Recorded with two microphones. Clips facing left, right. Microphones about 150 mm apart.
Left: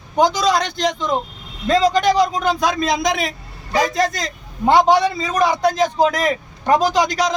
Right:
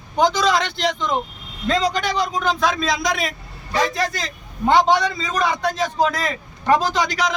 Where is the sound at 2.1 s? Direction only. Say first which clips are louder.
Left 4 dB; 10° left (ahead or behind).